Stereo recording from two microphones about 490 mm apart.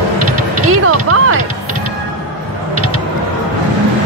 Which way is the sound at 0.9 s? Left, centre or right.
Right.